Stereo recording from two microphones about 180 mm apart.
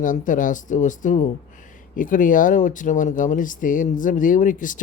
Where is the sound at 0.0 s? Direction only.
45° left (ahead or behind).